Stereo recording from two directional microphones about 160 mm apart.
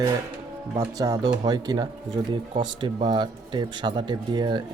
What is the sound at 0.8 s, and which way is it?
Speech, 20° right (ahead or behind).